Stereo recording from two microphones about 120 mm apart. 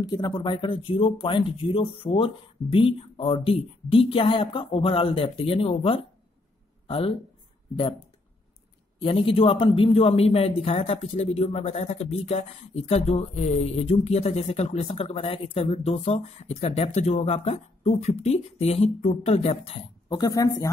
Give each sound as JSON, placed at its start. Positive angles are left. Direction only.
{"t": 0.1, "sound": "speech", "side_deg": 35}
{"t": 9.0, "sound": "speech", "side_deg": 50}
{"t": 20.1, "sound": "speech", "side_deg": 30}